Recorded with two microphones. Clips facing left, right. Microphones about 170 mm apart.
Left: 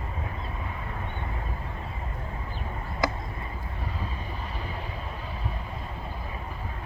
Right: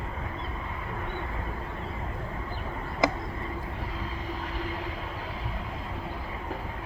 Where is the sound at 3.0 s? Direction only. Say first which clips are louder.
Right 3 dB; 20° right (ahead or behind).